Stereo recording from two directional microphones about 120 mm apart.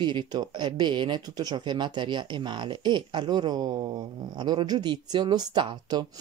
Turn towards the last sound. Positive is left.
turn(degrees=-35)  # may be behind; listen again after turning